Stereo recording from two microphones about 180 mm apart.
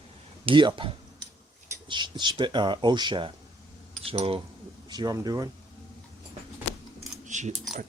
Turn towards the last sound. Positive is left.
turn(degrees=-40)  # may be behind; listen again after turning